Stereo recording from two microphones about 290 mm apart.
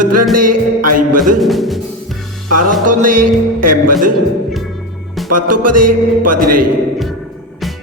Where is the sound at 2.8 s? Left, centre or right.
Right.